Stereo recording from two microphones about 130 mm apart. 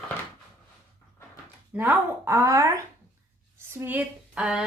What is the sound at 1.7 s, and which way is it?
A woman's voice, 20° right (ahead or behind).